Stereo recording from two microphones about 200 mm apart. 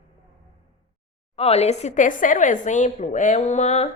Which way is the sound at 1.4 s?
30° left (ahead or behind).